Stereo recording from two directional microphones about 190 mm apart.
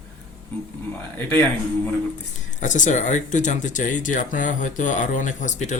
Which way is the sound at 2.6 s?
40° left (ahead or behind).